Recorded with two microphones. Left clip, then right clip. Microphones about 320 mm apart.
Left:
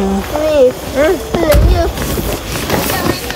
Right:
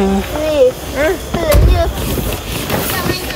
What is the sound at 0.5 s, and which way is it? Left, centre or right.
Speech, left.